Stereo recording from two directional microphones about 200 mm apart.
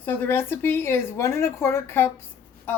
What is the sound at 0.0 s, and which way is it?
Speech, 10° left (ahead or behind).